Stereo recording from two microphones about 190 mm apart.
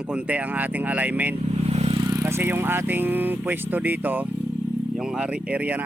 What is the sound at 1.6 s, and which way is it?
Speech, 30° right (ahead or behind).